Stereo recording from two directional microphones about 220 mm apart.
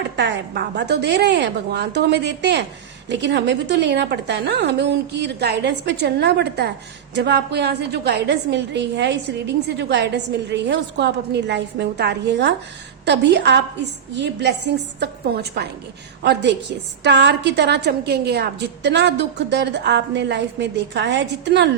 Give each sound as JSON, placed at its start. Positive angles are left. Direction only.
{"t": 0.2, "sound": "a woman's voice", "side_deg": -50}